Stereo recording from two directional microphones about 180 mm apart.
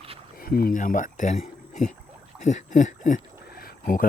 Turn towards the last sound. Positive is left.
turn(degrees=50)  # may be behind; listen again after turning